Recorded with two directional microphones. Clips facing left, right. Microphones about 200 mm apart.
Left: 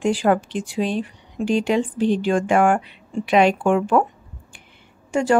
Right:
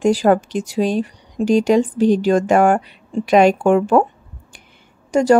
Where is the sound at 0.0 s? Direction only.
40° right (ahead or behind).